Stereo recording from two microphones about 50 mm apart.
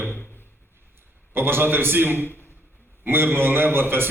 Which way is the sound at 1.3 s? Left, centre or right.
Right.